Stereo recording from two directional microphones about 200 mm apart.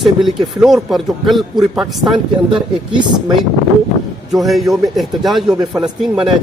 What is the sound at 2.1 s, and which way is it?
Speech, 25° right (ahead or behind).